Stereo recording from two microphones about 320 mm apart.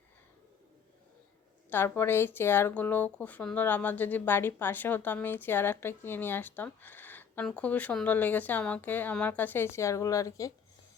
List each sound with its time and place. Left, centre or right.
1.7 s speech: centre